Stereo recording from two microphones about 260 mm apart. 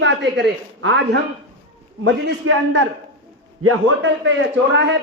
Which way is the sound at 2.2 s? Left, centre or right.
Right.